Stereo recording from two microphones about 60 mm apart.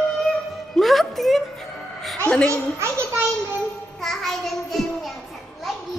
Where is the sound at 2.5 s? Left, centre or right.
Right.